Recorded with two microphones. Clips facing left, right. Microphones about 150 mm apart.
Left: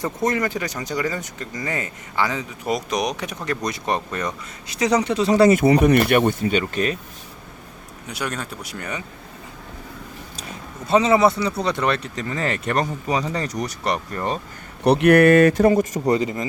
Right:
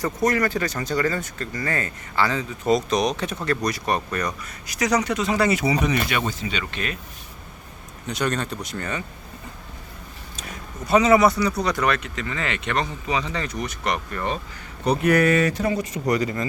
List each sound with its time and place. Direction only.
0.0 s speech: 25° left (ahead or behind)
5.5 s speech: 50° left (ahead or behind)
8.0 s speech: 10° left (ahead or behind)
10.8 s speech: 25° left (ahead or behind)
14.8 s speech: 70° left (ahead or behind); by 16.0 s 45° left (ahead or behind)
16.0 s speech: 25° left (ahead or behind)